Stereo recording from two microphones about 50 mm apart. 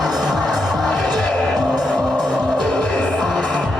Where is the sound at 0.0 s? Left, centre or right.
Centre.